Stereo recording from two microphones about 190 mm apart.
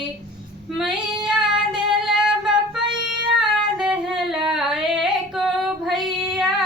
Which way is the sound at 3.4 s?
5° right (ahead or behind).